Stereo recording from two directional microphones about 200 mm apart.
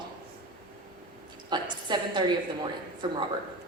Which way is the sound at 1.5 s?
20° right (ahead or behind).